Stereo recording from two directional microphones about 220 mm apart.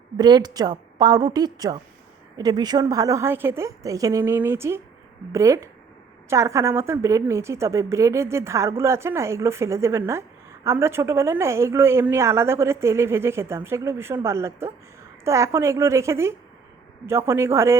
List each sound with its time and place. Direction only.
0.2 s a woman's voice: 20° right (ahead or behind)